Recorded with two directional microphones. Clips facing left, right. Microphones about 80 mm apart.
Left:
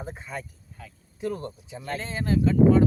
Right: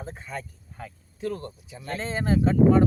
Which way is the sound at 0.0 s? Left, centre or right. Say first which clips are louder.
Even; centre.